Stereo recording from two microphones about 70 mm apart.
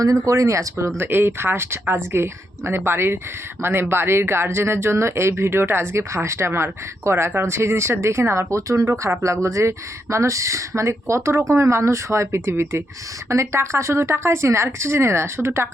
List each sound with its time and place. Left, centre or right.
0.0 s speech: right
0.9 s speech: right